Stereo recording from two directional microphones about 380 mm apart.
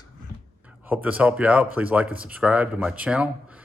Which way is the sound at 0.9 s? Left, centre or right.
Centre.